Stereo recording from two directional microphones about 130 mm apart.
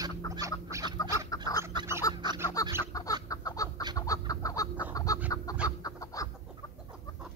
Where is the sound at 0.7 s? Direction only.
25° right (ahead or behind).